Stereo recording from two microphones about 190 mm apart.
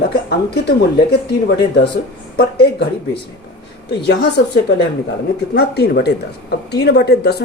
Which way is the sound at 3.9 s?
60° left (ahead or behind).